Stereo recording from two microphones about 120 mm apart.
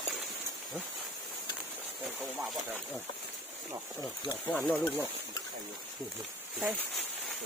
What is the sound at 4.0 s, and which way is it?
Speech, 30° left (ahead or behind).